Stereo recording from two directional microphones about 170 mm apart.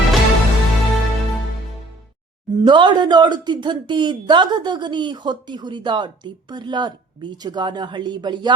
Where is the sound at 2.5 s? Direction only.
25° right (ahead or behind).